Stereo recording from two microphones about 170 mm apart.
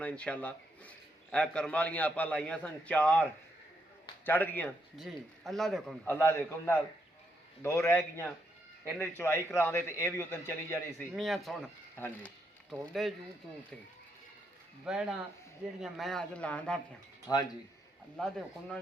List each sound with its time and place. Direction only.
0.0 s a man's voice: 10° left (ahead or behind)
4.3 s a man's voice: 10° left (ahead or behind)
4.9 s speech: centre (ahead or behind)
6.1 s a man's voice: 15° left (ahead or behind)
9.0 s a man's voice: 15° left (ahead or behind)
11.1 s speech: centre (ahead or behind)
11.9 s a man's voice: 10° left (ahead or behind)
12.8 s speech: centre (ahead or behind)
14.8 s speech: 5° right (ahead or behind)
17.3 s speech: 20° left (ahead or behind)
18.2 s speech: 5° left (ahead or behind)